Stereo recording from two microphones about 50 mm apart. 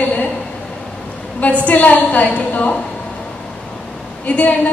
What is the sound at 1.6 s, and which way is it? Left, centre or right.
A woman's voice, left.